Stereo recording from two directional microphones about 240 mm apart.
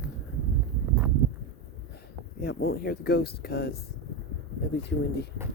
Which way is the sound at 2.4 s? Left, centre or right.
Left.